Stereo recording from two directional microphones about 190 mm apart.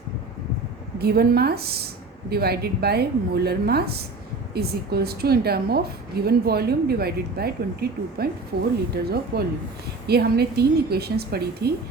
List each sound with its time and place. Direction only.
0.9 s speech: 55° right (ahead or behind)
9.3 s speech: 55° right (ahead or behind)